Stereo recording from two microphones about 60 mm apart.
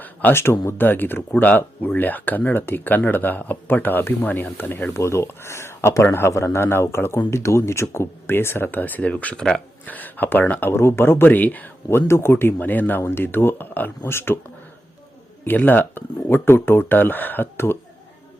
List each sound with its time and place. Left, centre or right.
0.0 s a sound: left
0.6 s speech: left
4.9 s speech: left
11.9 s speech: left
13.0 s speech: left
15.4 s speech: left